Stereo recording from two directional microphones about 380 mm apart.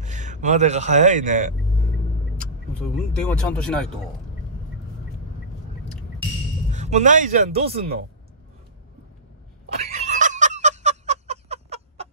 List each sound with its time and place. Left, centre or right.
0.0 s speech: centre
2.3 s speech: centre
6.7 s speech: centre
10.0 s a sound: centre